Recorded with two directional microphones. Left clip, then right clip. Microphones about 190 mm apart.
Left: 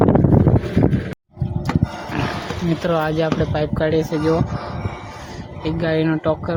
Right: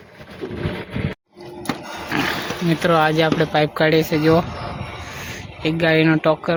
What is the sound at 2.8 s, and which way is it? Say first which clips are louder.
Speech: right 4 dB; 10° right (ahead or behind).